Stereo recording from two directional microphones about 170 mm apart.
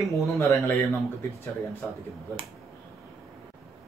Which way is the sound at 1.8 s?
10° left (ahead or behind).